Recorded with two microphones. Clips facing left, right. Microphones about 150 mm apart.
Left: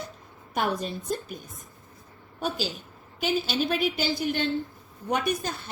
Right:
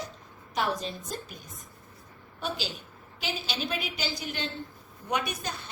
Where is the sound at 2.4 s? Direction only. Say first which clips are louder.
Left 4 dB; 45° left (ahead or behind).